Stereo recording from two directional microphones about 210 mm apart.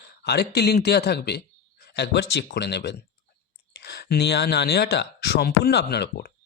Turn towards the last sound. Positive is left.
turn(degrees=50)  # may be behind; listen again after turning